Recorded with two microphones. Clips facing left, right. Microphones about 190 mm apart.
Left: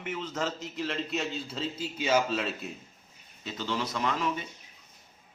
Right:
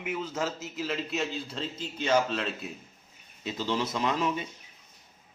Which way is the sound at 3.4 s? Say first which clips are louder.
Right 3 dB; 20° right (ahead or behind).